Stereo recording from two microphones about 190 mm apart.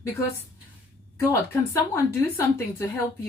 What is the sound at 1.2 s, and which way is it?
Speech, 15° left (ahead or behind).